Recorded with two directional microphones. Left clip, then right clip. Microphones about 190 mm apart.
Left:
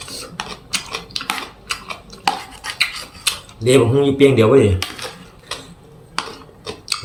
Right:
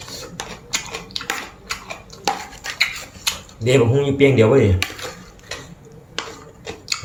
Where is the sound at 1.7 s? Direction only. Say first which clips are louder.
Left 3 dB; 15° left (ahead or behind).